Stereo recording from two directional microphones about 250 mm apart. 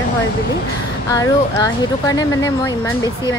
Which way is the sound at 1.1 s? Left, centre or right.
Centre.